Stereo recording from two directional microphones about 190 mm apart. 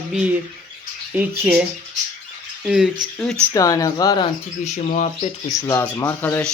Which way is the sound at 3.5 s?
20° left (ahead or behind).